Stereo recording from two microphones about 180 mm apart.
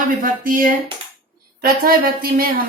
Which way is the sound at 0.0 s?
50° right (ahead or behind).